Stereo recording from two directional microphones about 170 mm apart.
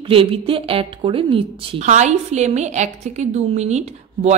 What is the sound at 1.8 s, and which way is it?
A woman's voice, 45° right (ahead or behind).